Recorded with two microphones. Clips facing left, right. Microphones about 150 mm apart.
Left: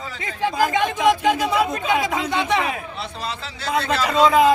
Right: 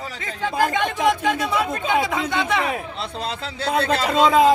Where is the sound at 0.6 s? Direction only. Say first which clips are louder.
Left 2 dB; 5° left (ahead or behind).